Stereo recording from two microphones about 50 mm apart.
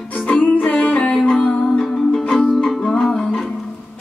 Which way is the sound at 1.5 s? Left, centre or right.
Centre.